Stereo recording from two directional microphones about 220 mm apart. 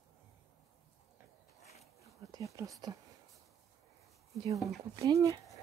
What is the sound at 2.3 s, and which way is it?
Speech, 15° right (ahead or behind).